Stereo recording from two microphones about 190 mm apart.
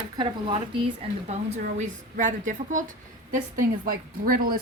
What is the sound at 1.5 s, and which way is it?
A woman's voice, 40° right (ahead or behind).